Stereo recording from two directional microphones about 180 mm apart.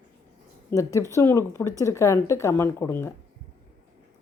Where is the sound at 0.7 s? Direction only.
15° left (ahead or behind).